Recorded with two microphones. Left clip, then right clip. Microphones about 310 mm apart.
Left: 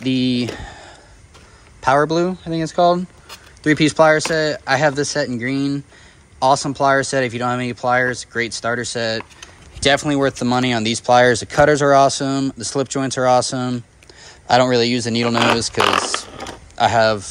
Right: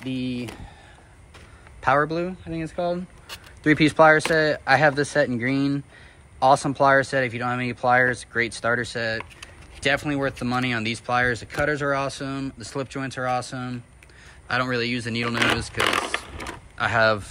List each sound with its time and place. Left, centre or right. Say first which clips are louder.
0.0 s speech: left 10 dB; left
1.8 s speech: left 6 dB; centre
3.3 s speech: left 3 dB; centre